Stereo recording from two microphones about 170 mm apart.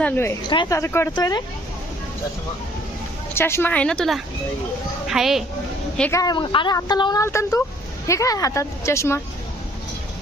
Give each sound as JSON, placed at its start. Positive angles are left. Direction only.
{"t": 0.0, "sound": "a woman's voice", "side_deg": 15}
{"t": 3.3, "sound": "a woman's voice", "side_deg": 15}
{"t": 6.0, "sound": "a woman's voice", "side_deg": 15}